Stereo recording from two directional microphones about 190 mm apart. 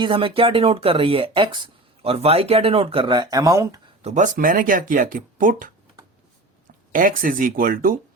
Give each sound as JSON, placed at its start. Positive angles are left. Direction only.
{"t": 0.0, "sound": "speech", "side_deg": -25}
{"t": 4.0, "sound": "speech", "side_deg": -40}